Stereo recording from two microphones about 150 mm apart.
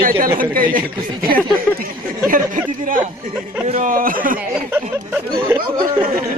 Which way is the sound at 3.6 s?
45° right (ahead or behind).